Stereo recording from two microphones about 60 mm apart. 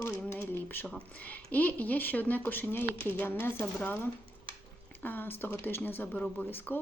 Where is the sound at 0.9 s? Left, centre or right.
Left.